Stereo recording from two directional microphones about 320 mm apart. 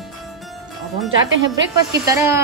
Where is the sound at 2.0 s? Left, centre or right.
Centre.